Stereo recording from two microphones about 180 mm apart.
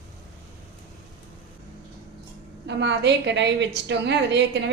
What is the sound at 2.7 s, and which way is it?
A woman's voice, 75° right (ahead or behind).